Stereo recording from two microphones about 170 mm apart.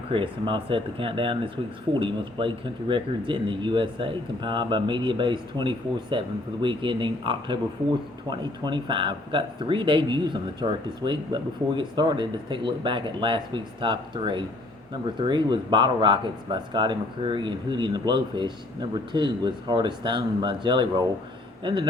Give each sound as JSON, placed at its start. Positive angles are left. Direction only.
{"t": 0.1, "sound": "a man's voice", "side_deg": -30}